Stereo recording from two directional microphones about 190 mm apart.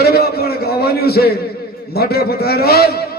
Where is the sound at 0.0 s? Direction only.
55° left (ahead or behind).